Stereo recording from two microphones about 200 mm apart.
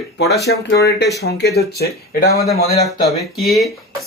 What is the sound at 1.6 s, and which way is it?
Speech, 50° left (ahead or behind).